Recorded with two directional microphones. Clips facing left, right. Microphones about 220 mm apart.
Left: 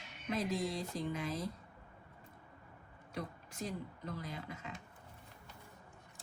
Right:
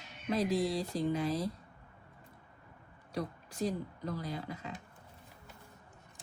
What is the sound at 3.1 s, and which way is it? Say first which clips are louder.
Speech: right 6 dB; 35° right (ahead or behind).